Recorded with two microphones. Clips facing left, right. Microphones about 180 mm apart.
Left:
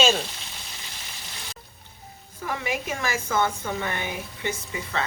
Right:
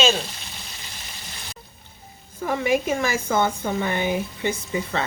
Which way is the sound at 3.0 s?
25° right (ahead or behind).